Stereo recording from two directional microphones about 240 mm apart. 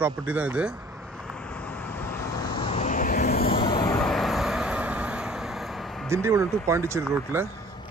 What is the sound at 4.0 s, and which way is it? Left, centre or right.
Vehicle, centre.